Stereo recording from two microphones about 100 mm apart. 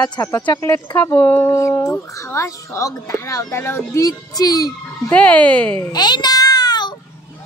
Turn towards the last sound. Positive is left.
turn(degrees=45)  # may be behind; listen again after turning